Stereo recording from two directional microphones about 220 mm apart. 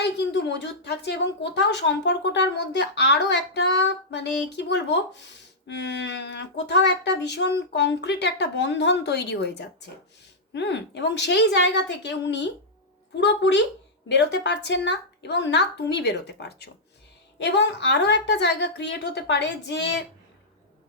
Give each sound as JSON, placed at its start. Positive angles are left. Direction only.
{"t": 0.0, "sound": "speech", "side_deg": 50}